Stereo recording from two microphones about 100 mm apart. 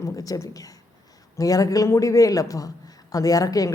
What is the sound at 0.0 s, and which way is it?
A man's voice, 35° left (ahead or behind).